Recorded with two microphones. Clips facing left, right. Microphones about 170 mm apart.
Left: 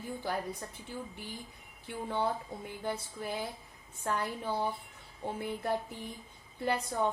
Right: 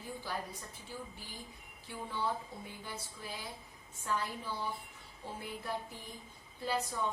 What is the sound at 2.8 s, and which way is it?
A woman's voice, 60° left (ahead or behind).